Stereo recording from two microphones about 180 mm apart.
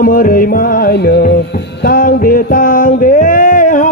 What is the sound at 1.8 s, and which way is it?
Music, 55° left (ahead or behind).